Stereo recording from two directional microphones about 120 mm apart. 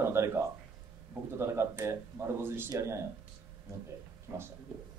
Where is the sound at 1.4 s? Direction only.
20° right (ahead or behind).